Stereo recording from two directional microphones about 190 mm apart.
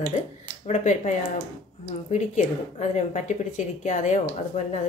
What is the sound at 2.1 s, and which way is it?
A woman's voice, 40° left (ahead or behind).